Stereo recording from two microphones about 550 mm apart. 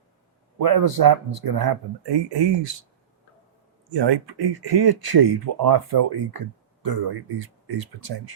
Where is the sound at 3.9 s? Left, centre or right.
Right.